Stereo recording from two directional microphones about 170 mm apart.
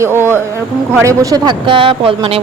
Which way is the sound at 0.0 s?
15° right (ahead or behind).